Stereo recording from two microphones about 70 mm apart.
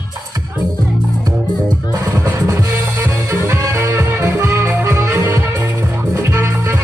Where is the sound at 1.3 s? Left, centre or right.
Right.